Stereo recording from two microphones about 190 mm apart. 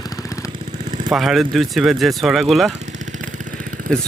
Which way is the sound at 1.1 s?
Centre (ahead or behind).